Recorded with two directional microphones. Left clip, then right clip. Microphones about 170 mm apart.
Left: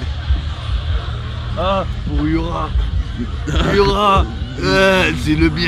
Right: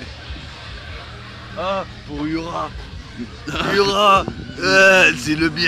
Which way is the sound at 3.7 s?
45° right (ahead or behind).